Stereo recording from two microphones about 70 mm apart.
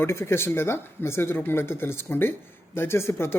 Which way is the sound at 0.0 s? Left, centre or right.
Left.